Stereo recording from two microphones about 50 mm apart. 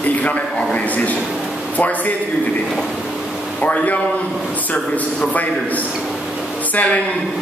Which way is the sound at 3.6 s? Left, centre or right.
Left.